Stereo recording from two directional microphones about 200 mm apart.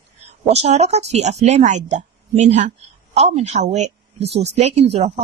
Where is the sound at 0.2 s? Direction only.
35° right (ahead or behind).